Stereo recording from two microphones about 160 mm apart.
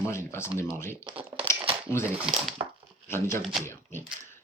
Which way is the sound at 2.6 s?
25° right (ahead or behind).